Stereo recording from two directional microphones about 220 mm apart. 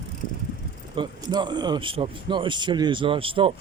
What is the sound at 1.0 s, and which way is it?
A man's voice, 20° right (ahead or behind).